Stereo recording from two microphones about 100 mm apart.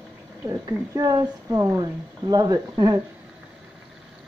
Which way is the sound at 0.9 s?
40° right (ahead or behind).